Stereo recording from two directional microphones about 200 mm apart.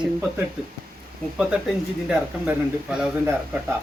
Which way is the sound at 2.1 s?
5° right (ahead or behind).